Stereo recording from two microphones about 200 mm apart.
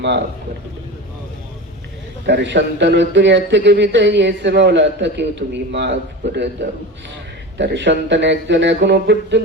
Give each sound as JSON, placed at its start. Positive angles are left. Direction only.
{"t": 2.2, "sound": "a man's voice", "side_deg": -65}